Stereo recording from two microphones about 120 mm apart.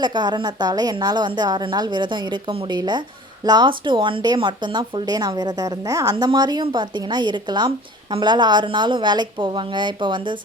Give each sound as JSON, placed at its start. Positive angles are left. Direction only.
{"t": 0.0, "sound": "speech", "side_deg": -40}